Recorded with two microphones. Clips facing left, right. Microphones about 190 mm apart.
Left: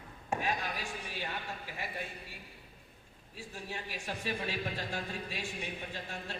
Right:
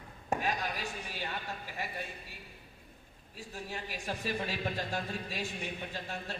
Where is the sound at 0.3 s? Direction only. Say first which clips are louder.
Right 1 dB; 40° right (ahead or behind).